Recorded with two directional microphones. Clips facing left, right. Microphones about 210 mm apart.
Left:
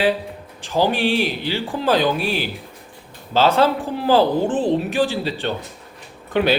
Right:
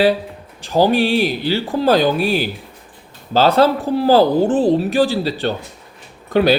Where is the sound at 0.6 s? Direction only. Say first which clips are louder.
Right 4 dB; 40° right (ahead or behind).